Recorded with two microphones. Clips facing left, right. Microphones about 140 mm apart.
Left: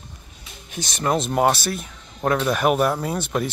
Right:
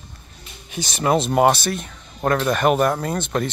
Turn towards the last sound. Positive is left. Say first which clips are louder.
# right 1 dB
turn(degrees=10)  # may be behind; listen again after turning